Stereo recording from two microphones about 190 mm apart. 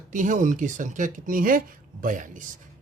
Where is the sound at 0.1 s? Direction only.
40° right (ahead or behind).